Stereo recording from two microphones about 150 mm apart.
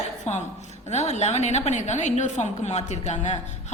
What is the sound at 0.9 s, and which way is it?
A woman's voice, 50° left (ahead or behind).